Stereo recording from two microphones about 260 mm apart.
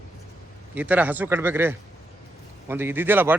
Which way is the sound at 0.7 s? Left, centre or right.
Centre.